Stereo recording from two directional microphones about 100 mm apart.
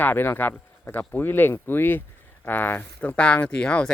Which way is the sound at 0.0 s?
20° left (ahead or behind).